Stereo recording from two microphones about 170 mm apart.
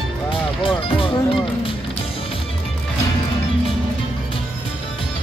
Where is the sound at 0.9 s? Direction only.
30° left (ahead or behind).